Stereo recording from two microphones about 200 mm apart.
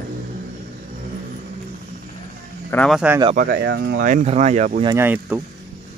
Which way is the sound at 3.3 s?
50° right (ahead or behind).